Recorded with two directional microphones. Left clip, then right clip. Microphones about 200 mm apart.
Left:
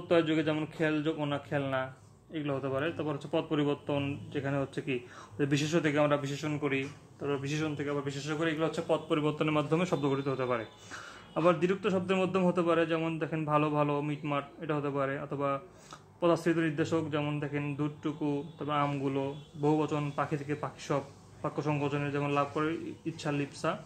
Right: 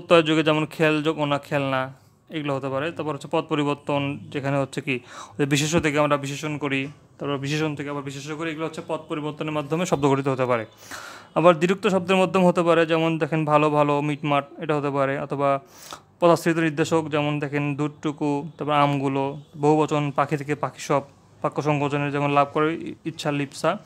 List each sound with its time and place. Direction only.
0.1 s a man's voice: 50° right (ahead or behind); by 9.9 s 25° right (ahead or behind)
10.0 s a man's voice: 50° right (ahead or behind)